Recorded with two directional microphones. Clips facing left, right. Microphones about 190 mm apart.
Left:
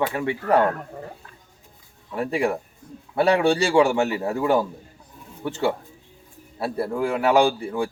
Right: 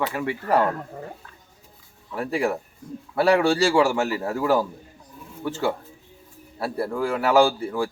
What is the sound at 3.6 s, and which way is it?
Speech, centre (ahead or behind).